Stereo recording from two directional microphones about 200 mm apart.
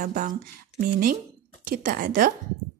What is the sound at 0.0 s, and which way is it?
A woman's voice, 40° right (ahead or behind).